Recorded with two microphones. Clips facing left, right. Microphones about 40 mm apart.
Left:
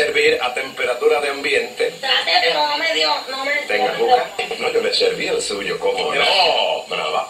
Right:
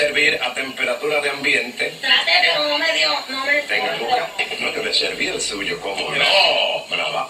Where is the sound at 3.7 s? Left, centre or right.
Centre.